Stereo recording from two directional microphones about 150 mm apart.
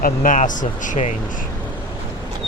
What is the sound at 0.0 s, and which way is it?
Speech, 65° left (ahead or behind).